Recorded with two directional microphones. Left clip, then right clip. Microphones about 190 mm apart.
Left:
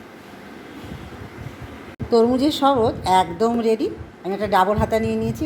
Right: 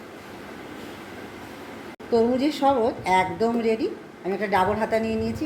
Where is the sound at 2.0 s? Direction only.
35° left (ahead or behind).